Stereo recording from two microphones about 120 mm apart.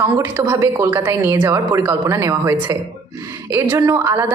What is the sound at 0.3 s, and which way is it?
A woman's voice, 20° right (ahead or behind).